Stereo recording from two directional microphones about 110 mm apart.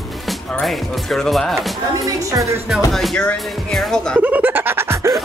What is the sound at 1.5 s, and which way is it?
Speech, 30° right (ahead or behind).